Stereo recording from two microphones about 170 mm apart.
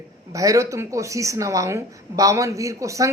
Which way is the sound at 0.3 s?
20° right (ahead or behind).